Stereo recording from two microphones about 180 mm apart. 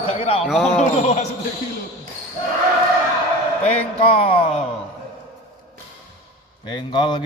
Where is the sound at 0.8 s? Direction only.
40° left (ahead or behind).